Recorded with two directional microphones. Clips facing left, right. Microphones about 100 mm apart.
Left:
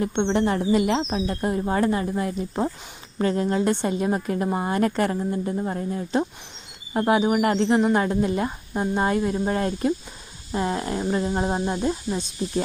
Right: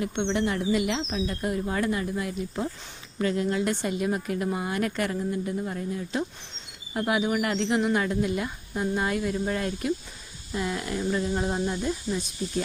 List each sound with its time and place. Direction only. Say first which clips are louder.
0.0 s speech: left 5 dB; 40° left (ahead or behind)